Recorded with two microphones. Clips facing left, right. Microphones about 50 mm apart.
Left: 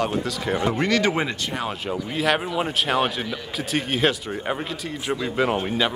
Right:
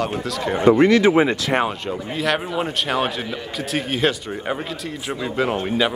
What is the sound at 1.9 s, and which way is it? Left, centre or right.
Speech, centre.